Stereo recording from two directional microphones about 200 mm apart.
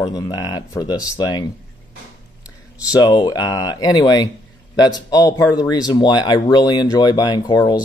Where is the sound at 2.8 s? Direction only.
20° left (ahead or behind).